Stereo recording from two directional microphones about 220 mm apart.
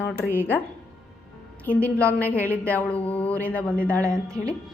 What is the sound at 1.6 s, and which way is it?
A woman's voice, 5° left (ahead or behind).